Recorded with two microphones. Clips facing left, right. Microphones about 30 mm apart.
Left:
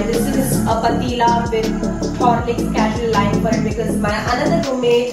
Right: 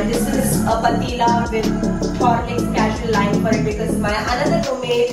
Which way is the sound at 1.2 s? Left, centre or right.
Centre.